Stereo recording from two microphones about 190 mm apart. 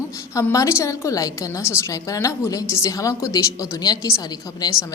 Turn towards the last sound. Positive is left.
turn(degrees=20)  # may be behind; listen again after turning